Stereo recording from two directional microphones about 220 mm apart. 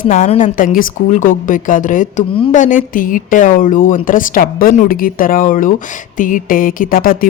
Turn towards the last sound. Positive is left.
turn(degrees=40)  # may be behind; listen again after turning